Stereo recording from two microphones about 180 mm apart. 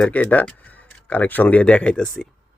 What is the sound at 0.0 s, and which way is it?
Speech, 10° left (ahead or behind).